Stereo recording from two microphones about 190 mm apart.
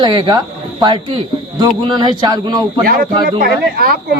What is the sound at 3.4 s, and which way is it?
Speech, 50° right (ahead or behind).